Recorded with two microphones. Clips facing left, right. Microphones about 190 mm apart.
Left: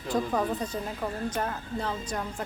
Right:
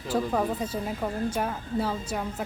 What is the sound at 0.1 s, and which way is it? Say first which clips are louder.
Speech: right 1 dB; 10° right (ahead or behind).